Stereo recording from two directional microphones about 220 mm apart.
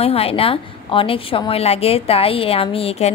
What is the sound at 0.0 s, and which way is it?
A woman's voice, 25° left (ahead or behind).